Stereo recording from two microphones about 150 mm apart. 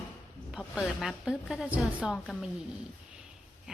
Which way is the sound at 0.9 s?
5° right (ahead or behind).